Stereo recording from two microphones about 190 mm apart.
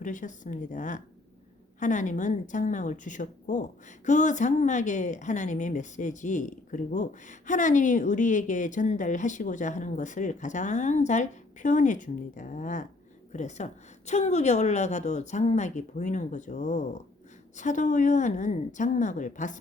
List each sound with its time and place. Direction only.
0.0 s a woman's voice: 40° left (ahead or behind)